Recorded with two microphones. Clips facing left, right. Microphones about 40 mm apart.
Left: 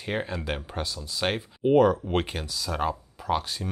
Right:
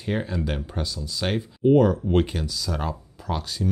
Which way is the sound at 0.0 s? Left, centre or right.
Centre.